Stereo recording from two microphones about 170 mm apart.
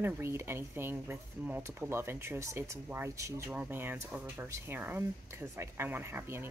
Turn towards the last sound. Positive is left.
turn(degrees=-15)  # may be behind; listen again after turning